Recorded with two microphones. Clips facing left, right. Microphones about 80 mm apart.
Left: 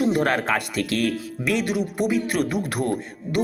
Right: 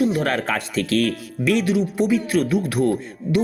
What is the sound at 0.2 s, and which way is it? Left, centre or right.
Speech, centre.